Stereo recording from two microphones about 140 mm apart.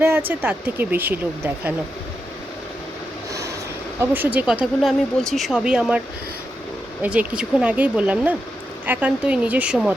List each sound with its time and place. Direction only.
0.0 s speech: 15° right (ahead or behind)
4.1 s speech: 10° right (ahead or behind)
7.0 s speech: 10° right (ahead or behind)